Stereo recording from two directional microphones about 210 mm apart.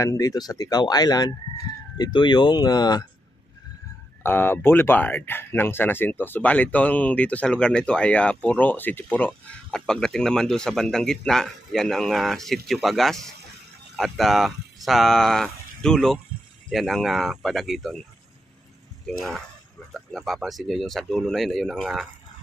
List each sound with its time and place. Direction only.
0.0 s speech: 15° left (ahead or behind)
4.2 s speech: 10° left (ahead or behind)
19.0 s speech: centre (ahead or behind)